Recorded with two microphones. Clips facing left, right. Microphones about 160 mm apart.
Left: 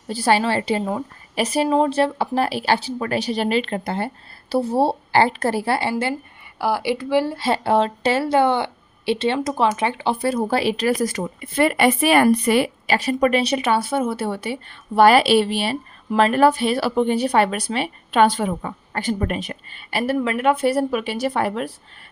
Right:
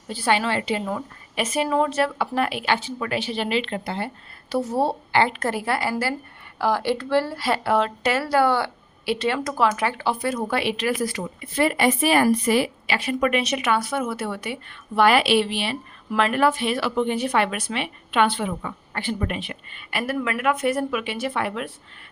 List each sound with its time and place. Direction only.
0.1 s speech: 40° left (ahead or behind)
4.4 s speech: 30° left (ahead or behind)
6.6 s speech: 10° left (ahead or behind)
7.3 s a woman's voice: 25° left (ahead or behind); by 12.7 s 60° left (ahead or behind)
12.9 s speech: 40° left (ahead or behind)